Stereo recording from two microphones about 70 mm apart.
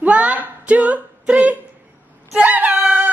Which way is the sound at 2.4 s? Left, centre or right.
Right.